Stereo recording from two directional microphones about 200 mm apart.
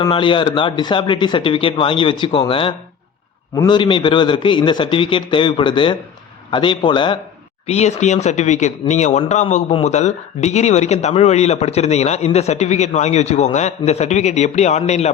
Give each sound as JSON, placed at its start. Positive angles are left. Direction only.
{"t": 0.0, "sound": "a man's voice", "side_deg": 25}